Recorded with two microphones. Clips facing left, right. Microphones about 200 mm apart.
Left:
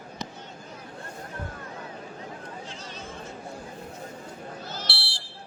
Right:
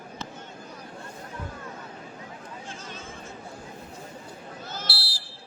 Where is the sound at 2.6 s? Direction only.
50° right (ahead or behind).